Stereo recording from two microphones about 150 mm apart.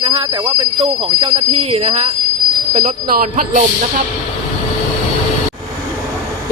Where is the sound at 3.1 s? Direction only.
60° right (ahead or behind).